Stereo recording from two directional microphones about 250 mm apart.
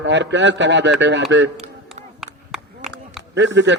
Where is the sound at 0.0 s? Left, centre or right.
Right.